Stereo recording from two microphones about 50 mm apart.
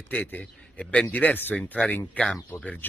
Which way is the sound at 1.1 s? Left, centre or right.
Left.